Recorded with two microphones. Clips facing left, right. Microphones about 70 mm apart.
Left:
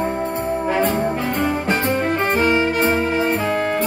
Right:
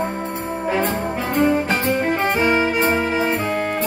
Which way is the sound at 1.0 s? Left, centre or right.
Centre.